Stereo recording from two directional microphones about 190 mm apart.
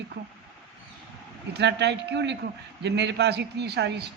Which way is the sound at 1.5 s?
65° right (ahead or behind).